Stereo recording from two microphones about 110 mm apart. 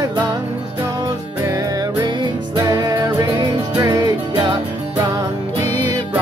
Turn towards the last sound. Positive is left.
turn(degrees=-35)  # may be behind; listen again after turning